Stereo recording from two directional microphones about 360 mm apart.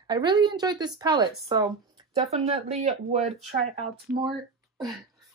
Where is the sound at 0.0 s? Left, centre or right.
Centre.